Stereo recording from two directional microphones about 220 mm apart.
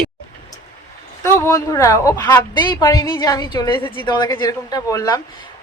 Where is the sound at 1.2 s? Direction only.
15° left (ahead or behind).